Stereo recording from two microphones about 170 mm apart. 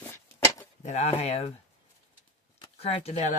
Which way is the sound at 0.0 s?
15° left (ahead or behind).